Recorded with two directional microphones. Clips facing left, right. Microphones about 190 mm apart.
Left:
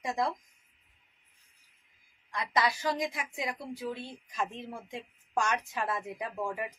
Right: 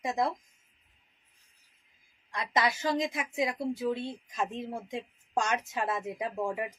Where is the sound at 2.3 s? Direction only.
25° right (ahead or behind).